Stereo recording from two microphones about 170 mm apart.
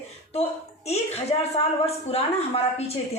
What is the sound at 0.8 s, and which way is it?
A woman's voice, 40° left (ahead or behind).